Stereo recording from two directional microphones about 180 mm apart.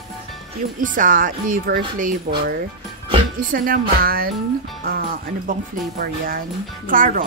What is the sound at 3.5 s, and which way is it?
Speech, 50° right (ahead or behind).